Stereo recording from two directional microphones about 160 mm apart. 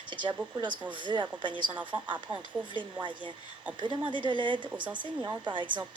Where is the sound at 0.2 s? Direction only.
30° right (ahead or behind).